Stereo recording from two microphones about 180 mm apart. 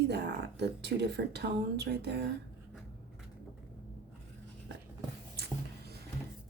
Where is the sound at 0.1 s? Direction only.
70° right (ahead or behind).